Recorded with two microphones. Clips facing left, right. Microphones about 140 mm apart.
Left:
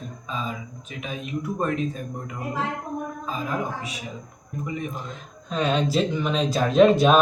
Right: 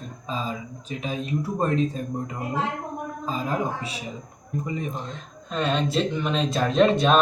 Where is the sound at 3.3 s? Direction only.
30° right (ahead or behind).